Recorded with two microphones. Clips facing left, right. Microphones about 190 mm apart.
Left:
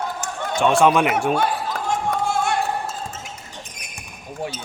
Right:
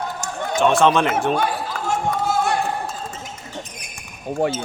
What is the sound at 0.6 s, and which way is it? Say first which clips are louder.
Speech: even; 15° left (ahead or behind).